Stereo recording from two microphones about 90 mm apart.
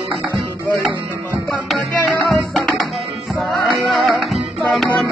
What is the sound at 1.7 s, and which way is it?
Music, centre (ahead or behind).